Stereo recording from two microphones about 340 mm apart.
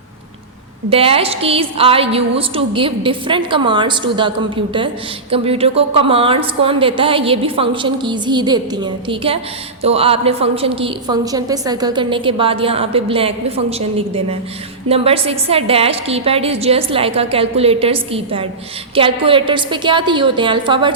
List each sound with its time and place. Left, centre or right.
0.9 s a woman's voice: centre
5.3 s a woman's voice: centre